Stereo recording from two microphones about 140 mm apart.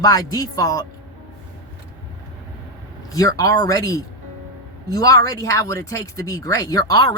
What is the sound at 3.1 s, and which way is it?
Speech, 25° left (ahead or behind).